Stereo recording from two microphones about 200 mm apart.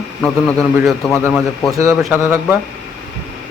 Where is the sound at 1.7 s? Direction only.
15° right (ahead or behind).